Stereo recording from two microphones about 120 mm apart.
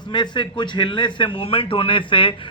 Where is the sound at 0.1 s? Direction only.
40° left (ahead or behind).